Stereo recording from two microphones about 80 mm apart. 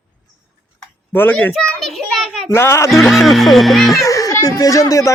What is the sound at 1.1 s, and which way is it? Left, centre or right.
Speech, left.